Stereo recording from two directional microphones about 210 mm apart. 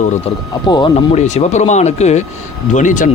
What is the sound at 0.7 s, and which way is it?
Speech, 20° left (ahead or behind).